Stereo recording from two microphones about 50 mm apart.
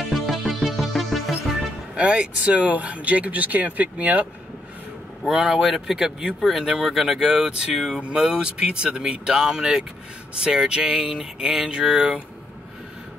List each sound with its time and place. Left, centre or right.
0.1 s music: centre
2.0 s speech: right
5.3 s speech: centre